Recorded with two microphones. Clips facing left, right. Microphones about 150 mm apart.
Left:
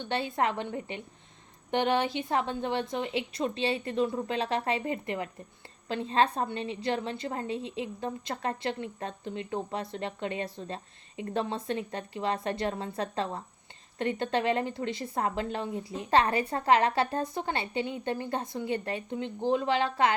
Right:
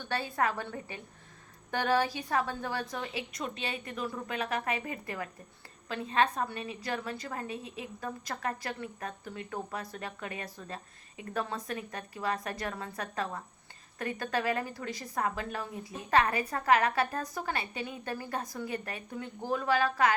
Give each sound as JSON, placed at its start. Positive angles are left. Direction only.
{"t": 0.0, "sound": "a woman's voice", "side_deg": 20}